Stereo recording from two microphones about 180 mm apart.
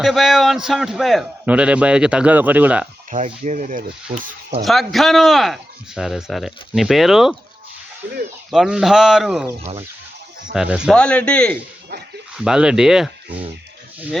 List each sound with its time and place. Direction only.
0.0 s a man's voice: centre (ahead or behind)
3.4 s speech: 45° right (ahead or behind)
4.6 s a man's voice: centre (ahead or behind)
8.4 s a man's voice: centre (ahead or behind)
9.6 s speech: 35° right (ahead or behind)
10.5 s a man's voice: 5° right (ahead or behind)
12.4 s a man's voice: 5° right (ahead or behind)